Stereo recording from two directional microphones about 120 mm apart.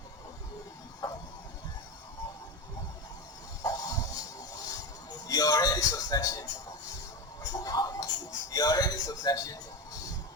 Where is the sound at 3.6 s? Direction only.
30° left (ahead or behind).